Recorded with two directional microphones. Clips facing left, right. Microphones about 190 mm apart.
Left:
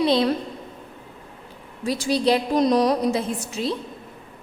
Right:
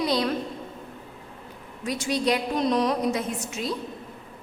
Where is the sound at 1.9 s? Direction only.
35° left (ahead or behind).